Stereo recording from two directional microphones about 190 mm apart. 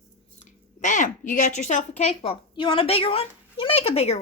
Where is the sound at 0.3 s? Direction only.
40° left (ahead or behind).